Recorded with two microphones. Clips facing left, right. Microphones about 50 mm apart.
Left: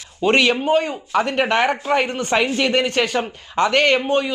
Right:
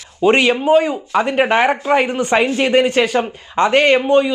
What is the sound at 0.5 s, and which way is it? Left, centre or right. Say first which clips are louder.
Speech: right 5 dB; centre.